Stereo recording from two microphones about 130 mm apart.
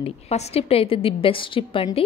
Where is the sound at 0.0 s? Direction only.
55° left (ahead or behind).